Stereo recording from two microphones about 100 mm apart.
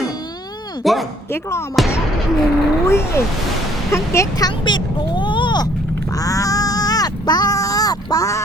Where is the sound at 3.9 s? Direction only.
30° left (ahead or behind).